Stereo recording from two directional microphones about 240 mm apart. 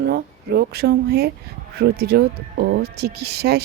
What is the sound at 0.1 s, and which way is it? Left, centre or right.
Speech, right.